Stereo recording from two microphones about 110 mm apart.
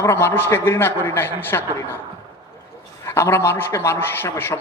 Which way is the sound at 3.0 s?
25° left (ahead or behind).